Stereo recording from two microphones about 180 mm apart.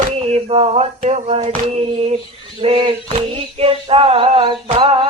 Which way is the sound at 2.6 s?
30° right (ahead or behind).